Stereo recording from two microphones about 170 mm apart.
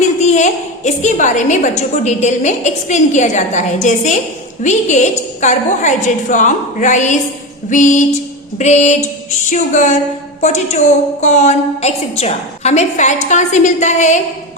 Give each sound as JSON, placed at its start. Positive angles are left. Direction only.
{"t": 0.2, "sound": "a woman's voice", "side_deg": 45}